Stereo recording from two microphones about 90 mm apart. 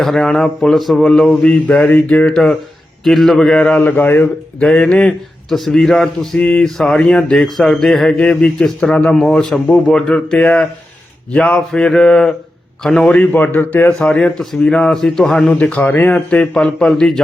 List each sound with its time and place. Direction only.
0.0 s a man's voice: 5° left (ahead or behind)
3.8 s speech: 25° left (ahead or behind)
4.6 s speech: 10° left (ahead or behind)
6.4 s speech: 15° left (ahead or behind)
6.7 s speech: 5° left (ahead or behind)
13.3 s speech: 20° left (ahead or behind); by 17.2 s 5° left (ahead or behind)